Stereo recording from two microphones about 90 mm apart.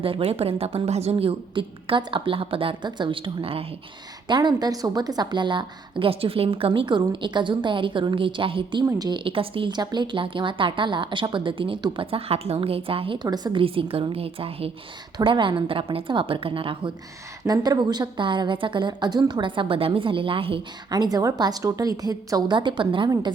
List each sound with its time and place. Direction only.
0.0 s a woman's voice: 90° right
4.3 s a woman's voice: 55° right (ahead or behind); by 8.8 s 75° right (ahead or behind)
9.0 s a woman's voice: 60° right (ahead or behind); by 9.7 s 85° right
9.7 s a woman's voice: 55° right (ahead or behind); by 11.8 s 70° right (ahead or behind)
11.9 s a woman's voice: 90° right
13.2 s a woman's voice: 50° right (ahead or behind)
13.6 s a woman's voice: 90° right
15.2 s a woman's voice: 70° right (ahead or behind)
17.4 s a woman's voice: 45° right (ahead or behind); by 20.6 s 85° right
20.9 s a woman's voice: 45° right (ahead or behind); by 23.0 s 65° right (ahead or behind)